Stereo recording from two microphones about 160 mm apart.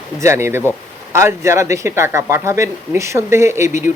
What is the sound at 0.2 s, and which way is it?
Speech, 15° right (ahead or behind).